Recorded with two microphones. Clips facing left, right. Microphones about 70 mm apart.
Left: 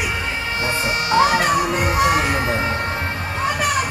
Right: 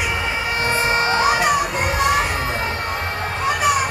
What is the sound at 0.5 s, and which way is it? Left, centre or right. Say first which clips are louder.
Emergency vehicle: right 3 dB; right.